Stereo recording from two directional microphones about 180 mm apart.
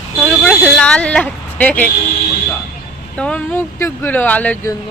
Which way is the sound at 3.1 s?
5° left (ahead or behind).